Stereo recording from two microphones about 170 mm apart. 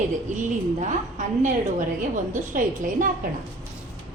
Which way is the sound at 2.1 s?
50° right (ahead or behind).